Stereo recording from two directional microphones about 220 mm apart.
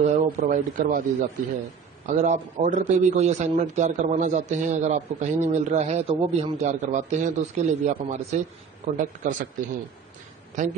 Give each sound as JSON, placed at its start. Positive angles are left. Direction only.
{"t": 0.0, "sound": "a man's voice", "side_deg": -35}
{"t": 2.0, "sound": "a man's voice", "side_deg": -35}